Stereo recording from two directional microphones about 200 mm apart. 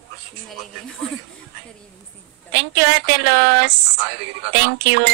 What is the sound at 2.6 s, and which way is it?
A woman's voice, 60° right (ahead or behind).